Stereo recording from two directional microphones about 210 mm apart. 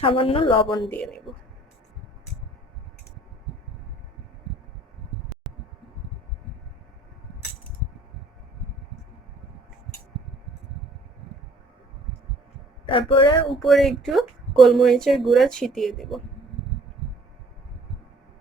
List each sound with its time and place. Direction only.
0.0 s a woman's voice: 25° left (ahead or behind)
0.9 s speech: 5° left (ahead or behind)
5.5 s a sound: centre (ahead or behind)
12.8 s speech: 25° left (ahead or behind)
13.5 s speech: centre (ahead or behind)